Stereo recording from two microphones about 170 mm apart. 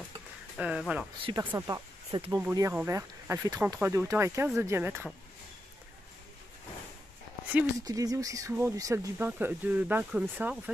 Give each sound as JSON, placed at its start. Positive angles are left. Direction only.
{"t": 0.6, "sound": "speech", "side_deg": -5}
{"t": 1.3, "sound": "speech", "side_deg": -25}
{"t": 2.3, "sound": "speech", "side_deg": -20}
{"t": 7.8, "sound": "speech", "side_deg": -20}